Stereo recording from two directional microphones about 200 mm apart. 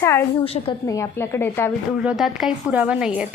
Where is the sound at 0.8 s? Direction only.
15° left (ahead or behind).